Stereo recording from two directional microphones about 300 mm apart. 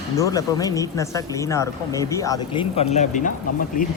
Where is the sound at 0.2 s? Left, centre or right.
Centre; by 3.9 s left.